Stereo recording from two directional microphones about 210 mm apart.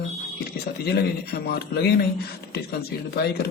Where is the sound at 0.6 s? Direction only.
45° left (ahead or behind).